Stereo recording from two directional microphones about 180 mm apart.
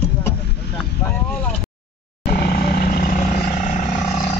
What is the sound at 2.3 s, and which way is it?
Vehicle, 60° left (ahead or behind).